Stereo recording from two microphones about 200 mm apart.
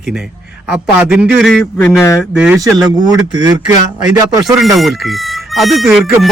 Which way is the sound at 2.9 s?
20° right (ahead or behind).